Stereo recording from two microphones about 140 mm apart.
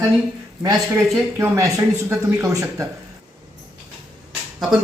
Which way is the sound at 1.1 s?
20° right (ahead or behind).